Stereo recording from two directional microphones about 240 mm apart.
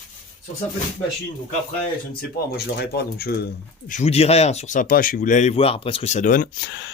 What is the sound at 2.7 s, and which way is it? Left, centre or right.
A man's voice, left.